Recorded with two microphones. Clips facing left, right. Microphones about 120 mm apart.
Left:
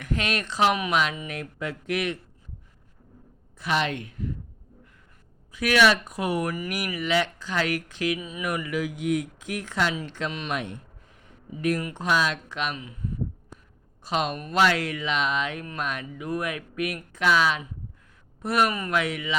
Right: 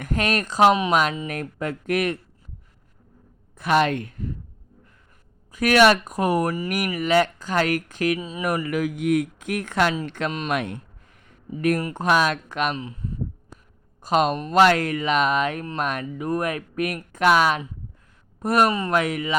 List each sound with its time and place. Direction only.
0.0 s speech: 45° right (ahead or behind)
0.7 s speech: 25° right (ahead or behind)
1.3 s speech: 50° right (ahead or behind)
3.6 s speech: 50° right (ahead or behind)
5.5 s speech: 45° right (ahead or behind)
8.2 s speech: 35° right (ahead or behind)
10.5 s speech: 65° right (ahead or behind)
11.8 s speech: 40° right (ahead or behind)
12.0 s speech: 55° right (ahead or behind)
14.0 s speech: 45° right (ahead or behind)
18.3 s speech: 40° right (ahead or behind)